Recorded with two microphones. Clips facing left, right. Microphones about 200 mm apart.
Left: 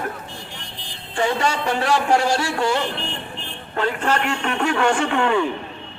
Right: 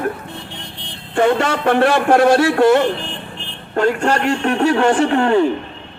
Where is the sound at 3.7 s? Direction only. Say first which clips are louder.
Right 6 dB; 45° right (ahead or behind).